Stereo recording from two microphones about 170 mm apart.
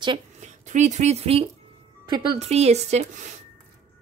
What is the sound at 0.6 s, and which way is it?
Speech, 45° right (ahead or behind).